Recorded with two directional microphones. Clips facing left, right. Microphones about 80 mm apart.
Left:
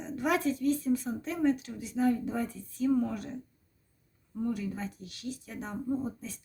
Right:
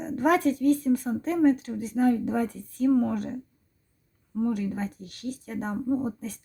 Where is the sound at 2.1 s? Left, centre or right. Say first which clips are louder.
Right 6 dB; right.